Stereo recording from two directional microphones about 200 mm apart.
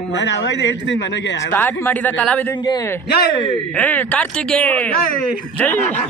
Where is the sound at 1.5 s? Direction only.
10° left (ahead or behind).